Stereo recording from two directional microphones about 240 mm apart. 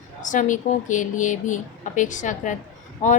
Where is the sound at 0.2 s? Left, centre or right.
Left.